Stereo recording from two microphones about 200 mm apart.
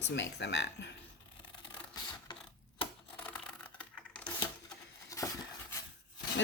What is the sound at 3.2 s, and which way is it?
Computer keyboard, 5° left (ahead or behind).